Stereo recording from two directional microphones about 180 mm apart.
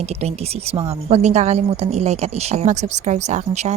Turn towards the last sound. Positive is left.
turn(degrees=-40)  # may be behind; listen again after turning